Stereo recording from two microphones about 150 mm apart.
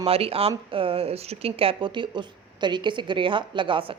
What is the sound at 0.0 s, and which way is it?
Speech, 40° right (ahead or behind).